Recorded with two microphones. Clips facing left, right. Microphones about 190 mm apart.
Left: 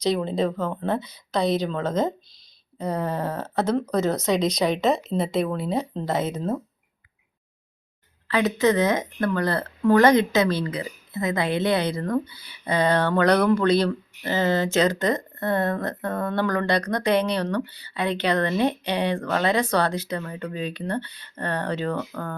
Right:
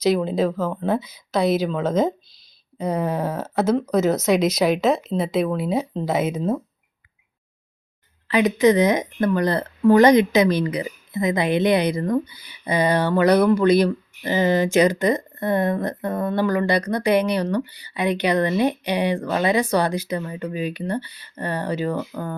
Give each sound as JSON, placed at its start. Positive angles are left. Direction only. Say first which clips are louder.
{"t": 0.0, "sound": "speech", "louder": "right 3 dB", "side_deg": -5}
{"t": 8.3, "sound": "speech", "louder": "right 4 dB", "side_deg": -15}